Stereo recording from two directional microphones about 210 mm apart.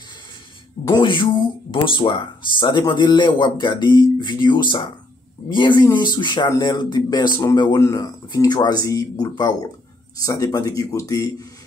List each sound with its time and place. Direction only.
0.8 s speech: 20° left (ahead or behind)